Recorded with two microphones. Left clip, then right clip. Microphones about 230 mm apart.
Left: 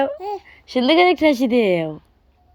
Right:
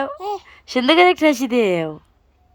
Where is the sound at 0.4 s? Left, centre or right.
Centre.